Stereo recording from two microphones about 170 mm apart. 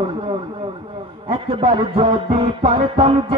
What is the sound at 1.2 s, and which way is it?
Music, 30° right (ahead or behind).